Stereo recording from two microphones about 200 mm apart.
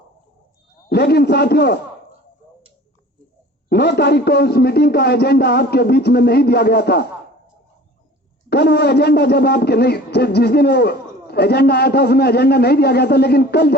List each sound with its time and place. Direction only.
0.9 s a man's voice: 55° left (ahead or behind)
3.7 s a man's voice: 55° left (ahead or behind)
8.4 s a man's voice: 55° left (ahead or behind)